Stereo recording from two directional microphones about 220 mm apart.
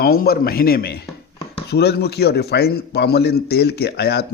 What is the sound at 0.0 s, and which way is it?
A man's voice, 45° left (ahead or behind).